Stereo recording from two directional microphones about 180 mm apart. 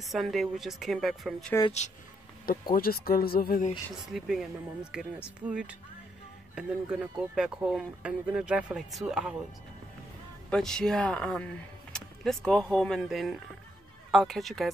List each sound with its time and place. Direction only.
0.0 s speech: centre (ahead or behind)
1.8 s speech: 40° left (ahead or behind)
2.7 s speech: 55° left (ahead or behind)
4.1 s speech: centre (ahead or behind)
10.5 s speech: 5° left (ahead or behind)